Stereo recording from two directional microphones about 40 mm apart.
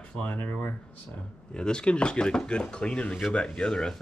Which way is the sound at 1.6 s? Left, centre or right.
Left.